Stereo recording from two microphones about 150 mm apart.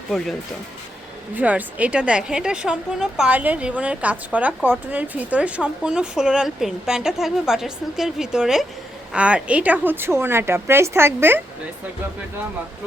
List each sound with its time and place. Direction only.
0.1 s speech: 5° right (ahead or behind)
1.4 s a woman's voice: 10° right (ahead or behind)